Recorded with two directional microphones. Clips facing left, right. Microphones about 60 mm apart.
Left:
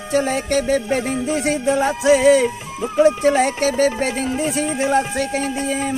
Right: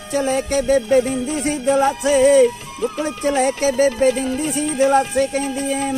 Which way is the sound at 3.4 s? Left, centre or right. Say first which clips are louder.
Even; left.